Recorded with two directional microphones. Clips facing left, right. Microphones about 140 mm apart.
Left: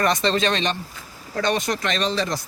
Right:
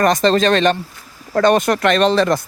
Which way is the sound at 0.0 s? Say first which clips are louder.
Right 7 dB; 45° right (ahead or behind).